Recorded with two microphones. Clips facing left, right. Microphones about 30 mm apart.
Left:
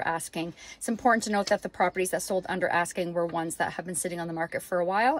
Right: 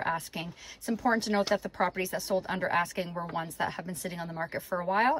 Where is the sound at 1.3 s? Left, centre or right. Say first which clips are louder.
Left 1 dB; centre.